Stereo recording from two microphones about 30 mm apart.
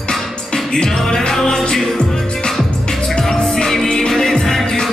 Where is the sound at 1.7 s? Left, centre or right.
Centre.